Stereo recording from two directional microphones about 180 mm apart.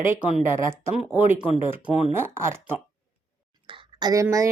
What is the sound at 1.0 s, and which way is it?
Speech, 10° right (ahead or behind).